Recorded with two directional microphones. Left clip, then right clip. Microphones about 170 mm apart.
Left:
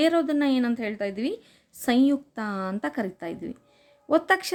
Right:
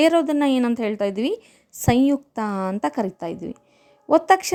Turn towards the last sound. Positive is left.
turn(degrees=-25)  # may be behind; listen again after turning